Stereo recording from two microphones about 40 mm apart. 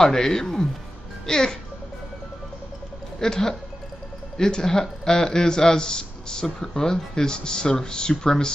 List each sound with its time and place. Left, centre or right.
0.0 s a man's voice: centre
3.2 s a man's voice: centre